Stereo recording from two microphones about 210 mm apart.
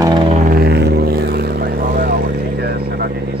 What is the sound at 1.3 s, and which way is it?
Vehicle, 45° right (ahead or behind).